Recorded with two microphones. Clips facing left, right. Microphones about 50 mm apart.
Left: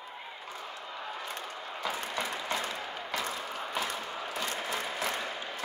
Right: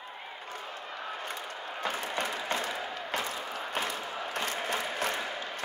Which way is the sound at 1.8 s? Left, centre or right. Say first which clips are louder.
Right 1 dB; right.